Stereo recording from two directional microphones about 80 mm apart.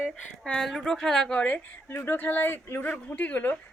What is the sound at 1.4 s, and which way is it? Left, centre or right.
A woman's voice, centre.